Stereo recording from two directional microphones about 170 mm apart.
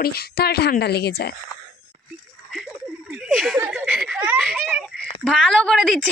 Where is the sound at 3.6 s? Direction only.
10° right (ahead or behind).